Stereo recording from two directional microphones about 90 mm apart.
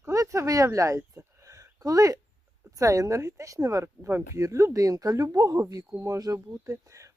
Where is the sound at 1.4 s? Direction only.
40° right (ahead or behind).